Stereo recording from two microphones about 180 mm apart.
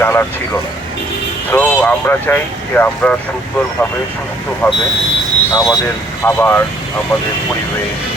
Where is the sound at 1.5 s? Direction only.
10° left (ahead or behind).